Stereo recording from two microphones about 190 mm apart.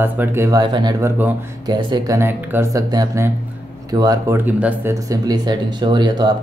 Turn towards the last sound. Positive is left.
turn(degrees=-20)  # may be behind; listen again after turning